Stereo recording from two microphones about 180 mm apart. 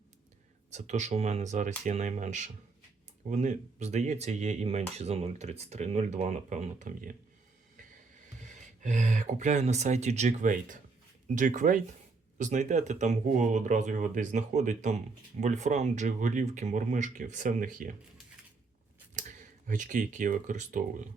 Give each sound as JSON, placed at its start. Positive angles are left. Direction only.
{"t": 0.7, "sound": "speech", "side_deg": -40}
{"t": 8.6, "sound": "speech", "side_deg": -45}
{"t": 19.1, "sound": "speech", "side_deg": -45}